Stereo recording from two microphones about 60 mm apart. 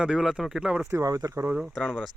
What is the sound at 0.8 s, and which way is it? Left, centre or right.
Speech, right.